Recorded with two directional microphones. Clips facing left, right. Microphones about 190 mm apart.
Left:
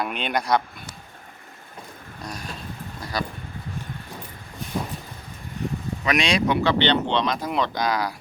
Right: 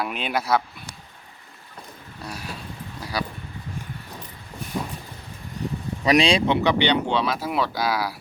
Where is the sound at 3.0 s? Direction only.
10° right (ahead or behind).